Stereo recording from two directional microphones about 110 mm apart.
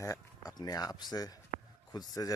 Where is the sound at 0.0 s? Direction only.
30° left (ahead or behind).